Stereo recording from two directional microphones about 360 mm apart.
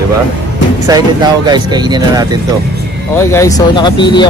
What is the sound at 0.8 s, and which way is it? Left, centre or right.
Speech, centre.